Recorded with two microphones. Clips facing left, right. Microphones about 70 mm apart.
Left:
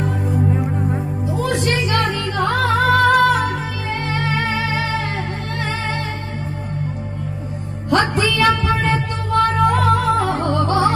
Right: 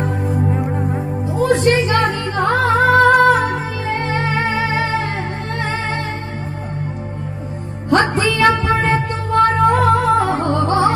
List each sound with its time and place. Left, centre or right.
0.9 s music: right
7.9 s music: right